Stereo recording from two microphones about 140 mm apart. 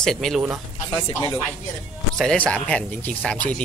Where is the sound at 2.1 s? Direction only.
5° left (ahead or behind).